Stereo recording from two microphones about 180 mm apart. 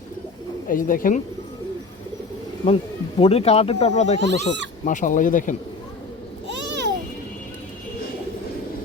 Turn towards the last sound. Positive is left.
turn(degrees=-75)  # may be behind; listen again after turning